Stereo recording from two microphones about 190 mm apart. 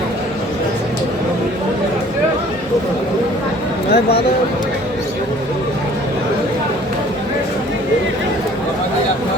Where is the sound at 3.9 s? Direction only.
55° left (ahead or behind).